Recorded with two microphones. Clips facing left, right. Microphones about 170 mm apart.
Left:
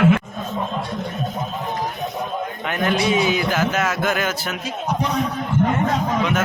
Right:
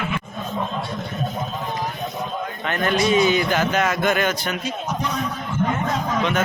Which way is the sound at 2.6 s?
5° left (ahead or behind).